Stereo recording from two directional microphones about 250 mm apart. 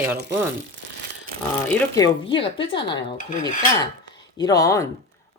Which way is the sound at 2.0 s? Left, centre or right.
Centre.